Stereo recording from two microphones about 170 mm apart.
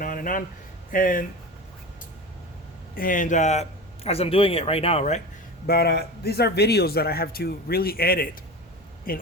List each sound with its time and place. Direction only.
0.0 s a sound: 55° left (ahead or behind)
0.9 s speech: 55° left (ahead or behind)
2.9 s a man's voice: 55° left (ahead or behind)
5.6 s a man's voice: 70° left (ahead or behind)